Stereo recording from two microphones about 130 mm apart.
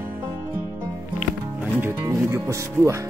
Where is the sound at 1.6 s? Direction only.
15° right (ahead or behind).